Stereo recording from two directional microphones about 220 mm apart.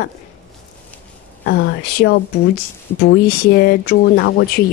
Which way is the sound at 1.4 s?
45° left (ahead or behind).